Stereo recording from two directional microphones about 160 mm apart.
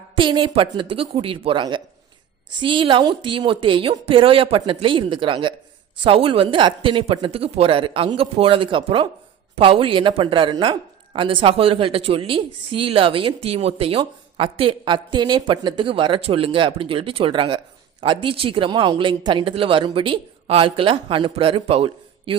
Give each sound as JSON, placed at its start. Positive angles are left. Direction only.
{"t": 0.2, "sound": "a woman's voice", "side_deg": -30}